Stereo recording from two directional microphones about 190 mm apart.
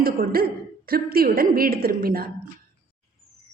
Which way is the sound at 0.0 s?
50° right (ahead or behind).